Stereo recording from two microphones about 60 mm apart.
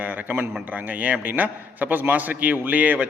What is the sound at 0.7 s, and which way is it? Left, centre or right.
A man's voice, right.